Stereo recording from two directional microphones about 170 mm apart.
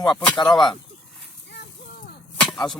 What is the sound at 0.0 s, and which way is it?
Speech, 25° left (ahead or behind).